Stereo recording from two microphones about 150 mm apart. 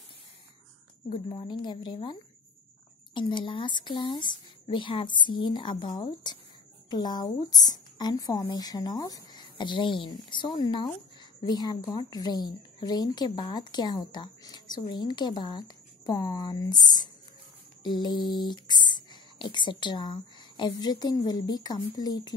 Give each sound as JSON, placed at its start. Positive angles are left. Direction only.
{"t": 1.1, "sound": "speech", "side_deg": 35}
{"t": 3.2, "sound": "a woman's voice", "side_deg": 30}